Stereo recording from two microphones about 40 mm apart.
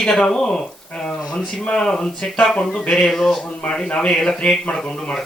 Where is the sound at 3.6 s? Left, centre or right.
Left.